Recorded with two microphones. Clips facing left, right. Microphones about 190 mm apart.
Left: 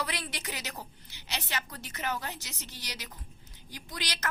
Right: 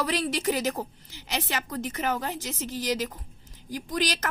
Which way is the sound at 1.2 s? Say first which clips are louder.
Right 6 dB; 90° right.